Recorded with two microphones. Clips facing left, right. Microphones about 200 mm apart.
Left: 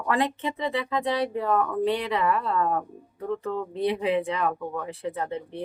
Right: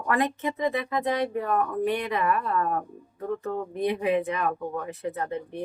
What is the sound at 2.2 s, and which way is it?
Speech, 20° left (ahead or behind).